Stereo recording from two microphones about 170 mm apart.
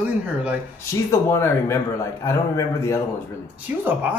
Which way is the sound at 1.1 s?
15° left (ahead or behind).